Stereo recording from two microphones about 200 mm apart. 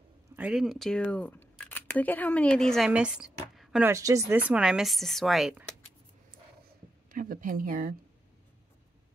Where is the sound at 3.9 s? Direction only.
15° right (ahead or behind).